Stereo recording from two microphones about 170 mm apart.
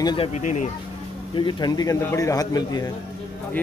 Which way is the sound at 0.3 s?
45° left (ahead or behind).